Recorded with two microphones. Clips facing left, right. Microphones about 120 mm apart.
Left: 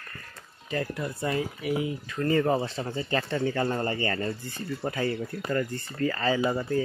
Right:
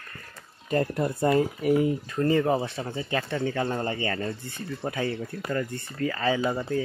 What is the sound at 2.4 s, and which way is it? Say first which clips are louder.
Speech: even; 10° right (ahead or behind).